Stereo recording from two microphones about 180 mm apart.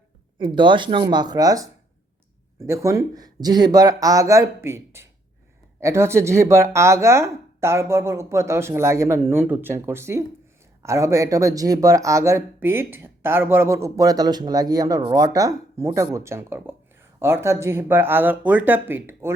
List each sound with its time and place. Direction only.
0.3 s speech: 25° right (ahead or behind)